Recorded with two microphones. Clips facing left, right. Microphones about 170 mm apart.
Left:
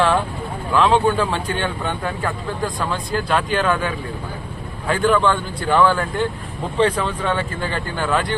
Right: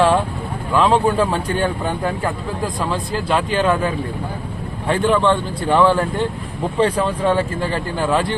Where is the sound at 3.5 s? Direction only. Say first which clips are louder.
Right 3 dB; 30° right (ahead or behind).